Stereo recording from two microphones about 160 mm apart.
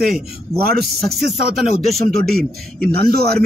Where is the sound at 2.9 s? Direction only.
75° right (ahead or behind).